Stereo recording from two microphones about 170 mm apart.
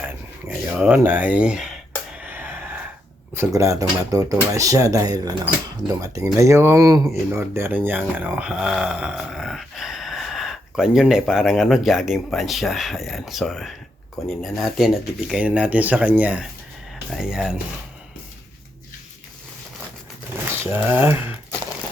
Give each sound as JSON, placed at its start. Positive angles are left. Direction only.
{"t": 0.0, "sound": "dog", "side_deg": -5}
{"t": 2.1, "sound": "a sound", "side_deg": -10}
{"t": 3.3, "sound": "speech", "side_deg": -20}
{"t": 20.7, "sound": "speech", "side_deg": -10}